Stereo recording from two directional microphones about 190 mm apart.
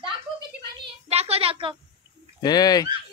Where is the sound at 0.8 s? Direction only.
30° right (ahead or behind).